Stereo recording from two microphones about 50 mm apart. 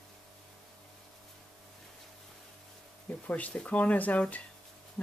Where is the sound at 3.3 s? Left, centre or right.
Left.